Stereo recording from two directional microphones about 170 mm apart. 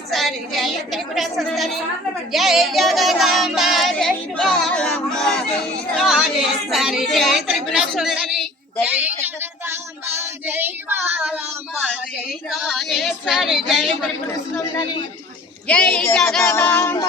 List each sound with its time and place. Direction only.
0.1 s speech: centre (ahead or behind)
2.3 s child singing: centre (ahead or behind)
5.9 s speech: centre (ahead or behind)
14.3 s child singing: 15° left (ahead or behind)
15.6 s child singing: 5° left (ahead or behind)